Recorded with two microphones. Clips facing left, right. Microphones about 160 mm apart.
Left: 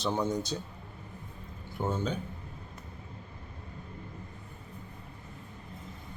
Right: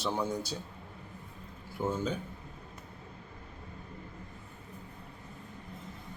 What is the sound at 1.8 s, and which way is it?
Speech, 30° left (ahead or behind).